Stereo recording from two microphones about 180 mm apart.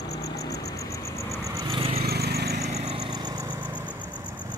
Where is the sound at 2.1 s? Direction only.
65° right (ahead or behind).